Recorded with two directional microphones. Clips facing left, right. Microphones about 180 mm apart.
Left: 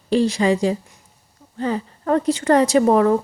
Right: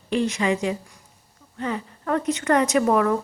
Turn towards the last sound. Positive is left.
turn(degrees=30)  # may be behind; listen again after turning